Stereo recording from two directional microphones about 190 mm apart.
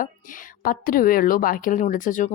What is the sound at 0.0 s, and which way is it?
A woman's voice, 45° left (ahead or behind).